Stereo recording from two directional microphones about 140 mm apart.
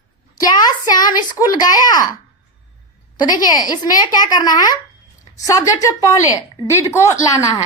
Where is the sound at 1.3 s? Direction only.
25° left (ahead or behind).